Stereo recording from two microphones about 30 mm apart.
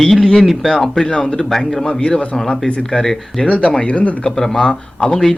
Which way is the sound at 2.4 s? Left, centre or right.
Left.